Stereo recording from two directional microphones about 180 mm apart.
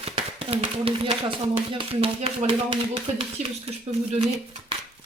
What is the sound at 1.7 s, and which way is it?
Speech, 30° right (ahead or behind).